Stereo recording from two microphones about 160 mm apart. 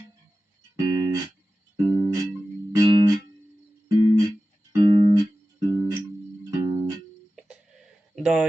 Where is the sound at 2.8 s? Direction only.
25° right (ahead or behind).